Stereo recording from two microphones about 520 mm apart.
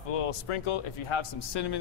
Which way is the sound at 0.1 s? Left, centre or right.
Left.